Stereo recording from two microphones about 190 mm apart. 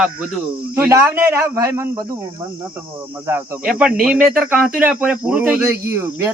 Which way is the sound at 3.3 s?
10° right (ahead or behind).